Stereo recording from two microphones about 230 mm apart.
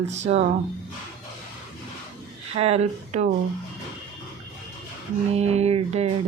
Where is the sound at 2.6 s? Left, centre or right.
Right.